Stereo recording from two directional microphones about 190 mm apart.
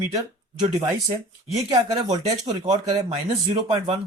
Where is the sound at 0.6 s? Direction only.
25° right (ahead or behind).